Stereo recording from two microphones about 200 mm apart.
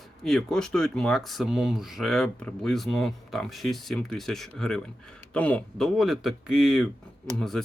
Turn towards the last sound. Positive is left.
turn(degrees=0)  # may be behind; listen again after turning